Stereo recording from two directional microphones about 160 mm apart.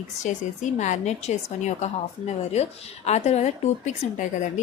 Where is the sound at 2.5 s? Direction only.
45° left (ahead or behind).